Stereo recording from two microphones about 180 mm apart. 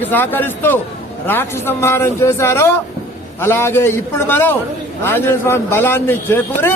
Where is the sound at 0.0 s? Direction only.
10° left (ahead or behind).